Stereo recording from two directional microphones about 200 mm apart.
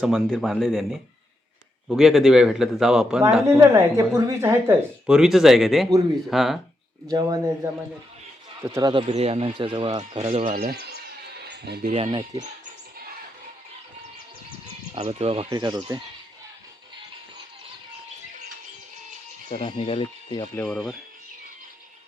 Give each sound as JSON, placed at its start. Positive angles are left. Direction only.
{"t": 0.0, "sound": "a man's voice", "side_deg": 0}
{"t": 3.4, "sound": "a man's voice", "side_deg": -15}
{"t": 7.1, "sound": "speech", "side_deg": -20}
{"t": 11.3, "sound": "a sound", "side_deg": -55}
{"t": 11.9, "sound": "speech", "side_deg": -30}
{"t": 14.9, "sound": "speech", "side_deg": -30}
{"t": 15.4, "sound": "speech", "side_deg": -20}
{"t": 19.5, "sound": "speech", "side_deg": 35}
{"t": 20.7, "sound": "a man's voice", "side_deg": 0}